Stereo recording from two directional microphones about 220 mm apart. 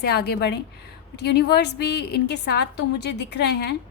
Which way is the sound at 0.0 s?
45° left (ahead or behind).